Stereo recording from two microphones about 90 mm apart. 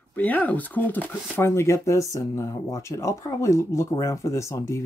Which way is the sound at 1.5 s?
35° left (ahead or behind).